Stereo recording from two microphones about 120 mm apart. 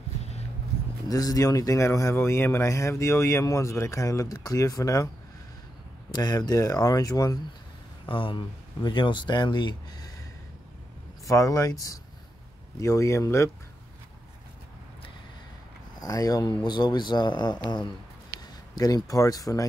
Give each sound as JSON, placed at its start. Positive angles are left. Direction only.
{"t": 1.0, "sound": "speech", "side_deg": 30}
{"t": 6.1, "sound": "speech", "side_deg": 35}
{"t": 8.1, "sound": "speech", "side_deg": 45}
{"t": 11.2, "sound": "speech", "side_deg": 25}
{"t": 16.0, "sound": "speech", "side_deg": 30}